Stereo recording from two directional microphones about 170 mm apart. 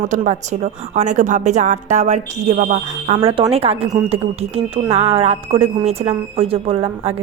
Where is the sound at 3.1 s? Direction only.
30° right (ahead or behind).